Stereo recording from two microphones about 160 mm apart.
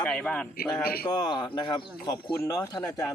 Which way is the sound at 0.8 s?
70° left (ahead or behind).